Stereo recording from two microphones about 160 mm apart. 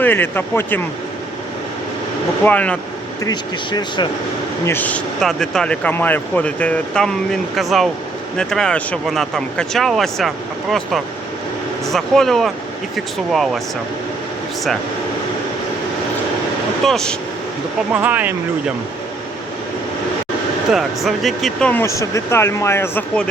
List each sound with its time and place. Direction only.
0.0 s speech: 10° left (ahead or behind)
2.4 s speech: 10° left (ahead or behind)
3.2 s speech: 25° left (ahead or behind)
4.6 s speech: 10° left (ahead or behind)
16.8 s speech: 5° left (ahead or behind)
17.9 s speech: 10° right (ahead or behind)
20.7 s speech: centre (ahead or behind)